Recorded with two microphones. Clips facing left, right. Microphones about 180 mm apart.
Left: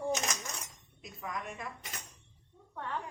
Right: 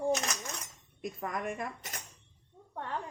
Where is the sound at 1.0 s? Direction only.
50° right (ahead or behind).